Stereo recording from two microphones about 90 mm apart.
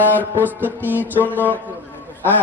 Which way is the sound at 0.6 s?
20° right (ahead or behind).